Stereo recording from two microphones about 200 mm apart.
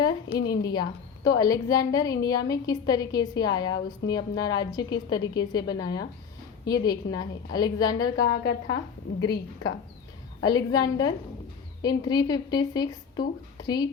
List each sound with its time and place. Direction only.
0.3 s a woman's voice: 20° left (ahead or behind)
8.1 s a woman's voice: 50° left (ahead or behind)
10.4 s a woman's voice: 20° left (ahead or behind)